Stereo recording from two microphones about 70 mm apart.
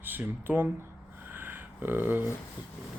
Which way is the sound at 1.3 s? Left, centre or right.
Right.